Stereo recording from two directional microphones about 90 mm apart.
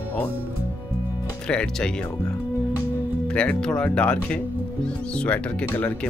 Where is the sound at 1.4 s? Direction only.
10° left (ahead or behind).